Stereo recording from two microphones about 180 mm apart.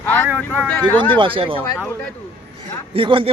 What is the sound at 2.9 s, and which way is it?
Speech, 30° right (ahead or behind).